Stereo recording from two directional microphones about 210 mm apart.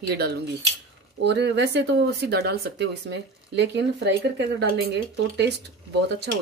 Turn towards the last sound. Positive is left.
turn(degrees=-55)  # may be behind; listen again after turning